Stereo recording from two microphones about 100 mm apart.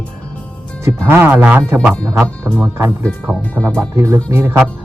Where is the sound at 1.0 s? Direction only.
20° right (ahead or behind).